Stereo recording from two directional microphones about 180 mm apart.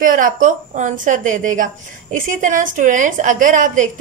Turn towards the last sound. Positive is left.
turn(degrees=-45)  # may be behind; listen again after turning